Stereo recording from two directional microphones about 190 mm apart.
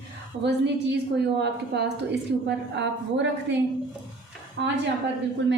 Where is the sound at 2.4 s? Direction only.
65° right (ahead or behind).